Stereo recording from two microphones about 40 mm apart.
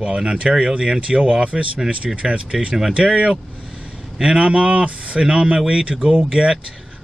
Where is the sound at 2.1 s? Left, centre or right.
Right.